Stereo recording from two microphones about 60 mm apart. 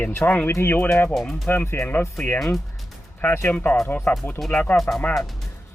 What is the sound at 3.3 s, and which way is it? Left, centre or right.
Speech, left.